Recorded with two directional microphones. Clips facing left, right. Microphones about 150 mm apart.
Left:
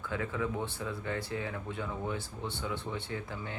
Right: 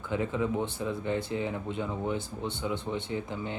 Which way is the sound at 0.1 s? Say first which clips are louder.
Right 5 dB; 20° right (ahead or behind).